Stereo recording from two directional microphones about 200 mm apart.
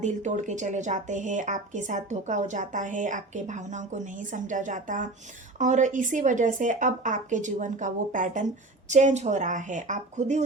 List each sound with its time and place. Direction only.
0.0 s speech: 35° right (ahead or behind)